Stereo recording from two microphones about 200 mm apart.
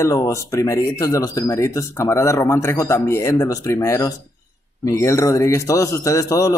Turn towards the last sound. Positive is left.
turn(degrees=15)  # may be behind; listen again after turning